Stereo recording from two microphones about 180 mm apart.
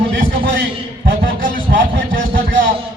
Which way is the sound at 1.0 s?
50° right (ahead or behind).